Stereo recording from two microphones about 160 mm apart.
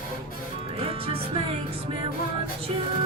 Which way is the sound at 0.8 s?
35° right (ahead or behind).